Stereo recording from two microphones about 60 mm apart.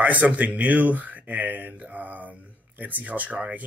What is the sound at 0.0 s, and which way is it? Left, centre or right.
Speech, right.